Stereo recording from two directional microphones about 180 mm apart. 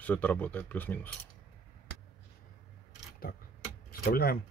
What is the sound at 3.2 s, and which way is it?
Speech, 55° left (ahead or behind).